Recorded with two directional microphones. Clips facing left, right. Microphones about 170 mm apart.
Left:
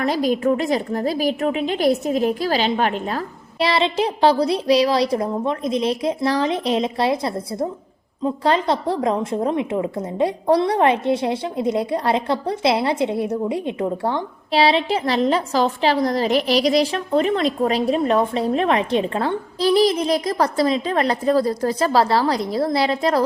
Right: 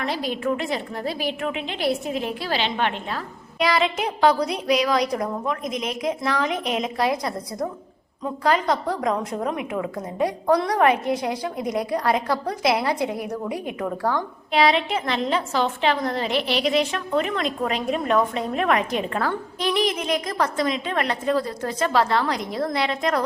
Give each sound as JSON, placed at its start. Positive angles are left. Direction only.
{"t": 0.0, "sound": "a woman's voice", "side_deg": 40}
{"t": 3.7, "sound": "a woman's voice", "side_deg": 30}